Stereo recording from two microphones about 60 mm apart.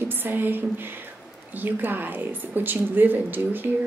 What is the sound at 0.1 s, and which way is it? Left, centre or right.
A woman's voice, right.